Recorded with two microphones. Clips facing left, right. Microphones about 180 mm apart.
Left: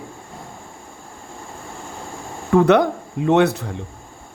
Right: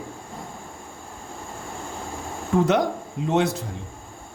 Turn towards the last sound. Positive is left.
turn(degrees=65)  # may be behind; listen again after turning